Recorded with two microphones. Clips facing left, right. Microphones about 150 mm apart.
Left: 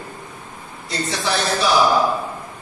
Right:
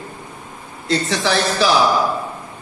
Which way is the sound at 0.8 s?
90° right.